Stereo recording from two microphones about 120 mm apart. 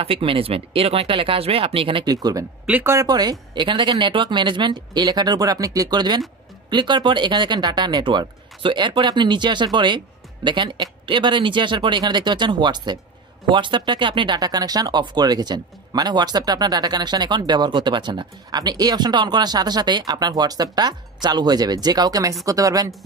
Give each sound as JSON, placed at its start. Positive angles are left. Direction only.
{"t": 0.0, "sound": "speech", "side_deg": -50}
{"t": 2.1, "sound": "speech", "side_deg": -30}
{"t": 2.6, "sound": "speech", "side_deg": -15}
{"t": 3.1, "sound": "a woman's voice", "side_deg": -35}